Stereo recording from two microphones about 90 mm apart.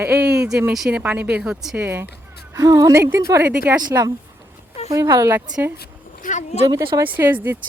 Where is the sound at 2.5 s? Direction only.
40° right (ahead or behind).